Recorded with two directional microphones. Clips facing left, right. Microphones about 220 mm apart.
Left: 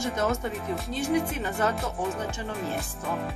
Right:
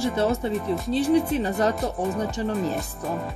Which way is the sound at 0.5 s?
Centre (ahead or behind).